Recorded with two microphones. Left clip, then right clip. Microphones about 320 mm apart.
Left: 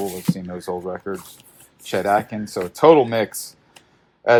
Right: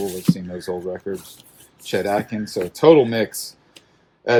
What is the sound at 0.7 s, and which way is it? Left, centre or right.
Speech, left.